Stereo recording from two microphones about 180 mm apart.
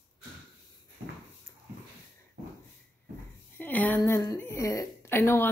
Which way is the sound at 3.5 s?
10° left (ahead or behind).